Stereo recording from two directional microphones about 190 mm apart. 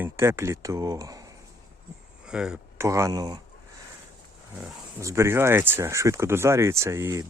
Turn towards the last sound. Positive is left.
turn(degrees=-15)  # may be behind; listen again after turning